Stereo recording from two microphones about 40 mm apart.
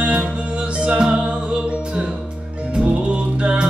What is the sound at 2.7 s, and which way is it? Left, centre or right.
Music, right.